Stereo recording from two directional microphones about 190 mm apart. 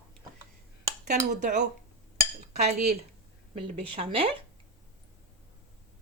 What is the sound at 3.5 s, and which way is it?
Speech, 30° right (ahead or behind).